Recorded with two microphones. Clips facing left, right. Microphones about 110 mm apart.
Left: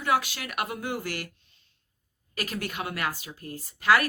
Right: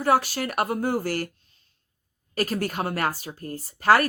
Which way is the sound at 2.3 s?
40° right (ahead or behind).